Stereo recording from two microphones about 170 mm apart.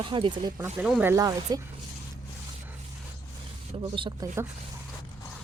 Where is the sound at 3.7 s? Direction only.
35° right (ahead or behind).